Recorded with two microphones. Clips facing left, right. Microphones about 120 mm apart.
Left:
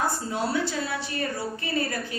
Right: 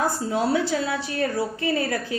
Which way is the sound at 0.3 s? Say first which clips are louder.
Right 6 dB; 90° right.